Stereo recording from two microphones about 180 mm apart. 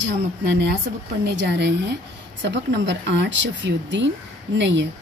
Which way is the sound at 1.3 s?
70° right (ahead or behind).